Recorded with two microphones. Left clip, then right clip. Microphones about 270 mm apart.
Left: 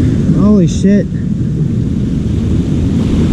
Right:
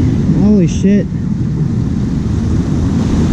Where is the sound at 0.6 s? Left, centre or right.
Left.